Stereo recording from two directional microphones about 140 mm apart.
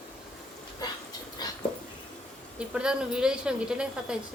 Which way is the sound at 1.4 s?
30° left (ahead or behind).